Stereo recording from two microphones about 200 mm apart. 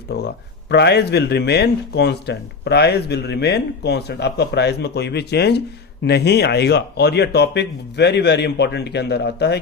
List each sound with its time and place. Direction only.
0.1 s speech: 55° left (ahead or behind)